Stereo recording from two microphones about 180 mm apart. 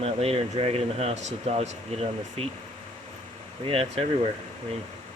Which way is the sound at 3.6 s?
35° right (ahead or behind).